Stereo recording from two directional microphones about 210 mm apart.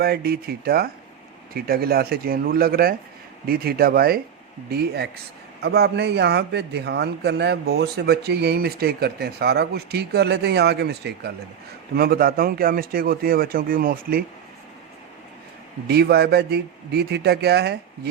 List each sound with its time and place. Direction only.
0.0 s a man's voice: 45° right (ahead or behind)
15.9 s a man's voice: 50° right (ahead or behind)